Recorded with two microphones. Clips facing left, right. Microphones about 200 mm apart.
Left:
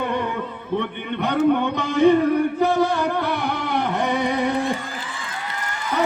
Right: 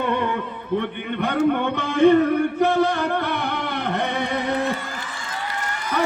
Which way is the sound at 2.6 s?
60° right (ahead or behind).